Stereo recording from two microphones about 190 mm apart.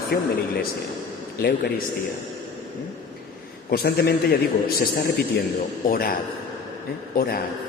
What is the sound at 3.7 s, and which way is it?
Speech, 55° left (ahead or behind).